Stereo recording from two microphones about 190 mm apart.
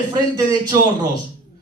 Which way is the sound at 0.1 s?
20° right (ahead or behind).